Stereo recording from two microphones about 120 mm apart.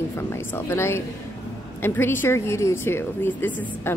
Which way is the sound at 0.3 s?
20° left (ahead or behind).